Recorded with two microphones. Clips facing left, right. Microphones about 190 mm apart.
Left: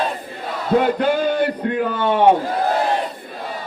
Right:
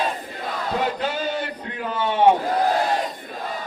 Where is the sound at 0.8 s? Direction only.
50° left (ahead or behind).